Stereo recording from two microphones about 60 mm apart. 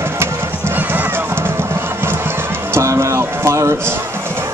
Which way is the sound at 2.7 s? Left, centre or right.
Right.